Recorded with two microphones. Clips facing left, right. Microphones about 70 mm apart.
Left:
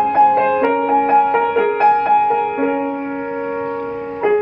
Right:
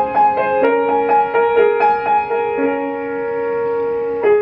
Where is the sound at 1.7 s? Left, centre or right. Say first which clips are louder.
Left 1 dB; centre.